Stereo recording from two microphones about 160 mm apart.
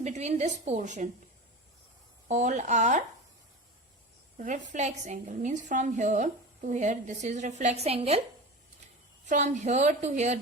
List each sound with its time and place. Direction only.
0.0 s a woman's voice: 45° right (ahead or behind)
2.2 s a woman's voice: 50° right (ahead or behind)
4.4 s a woman's voice: 50° right (ahead or behind)
9.2 s a woman's voice: 50° right (ahead or behind)